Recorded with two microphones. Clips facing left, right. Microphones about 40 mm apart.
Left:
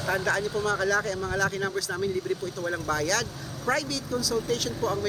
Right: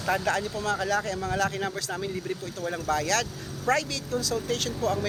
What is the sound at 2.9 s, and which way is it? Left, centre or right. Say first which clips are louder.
Speech: right 2 dB; right.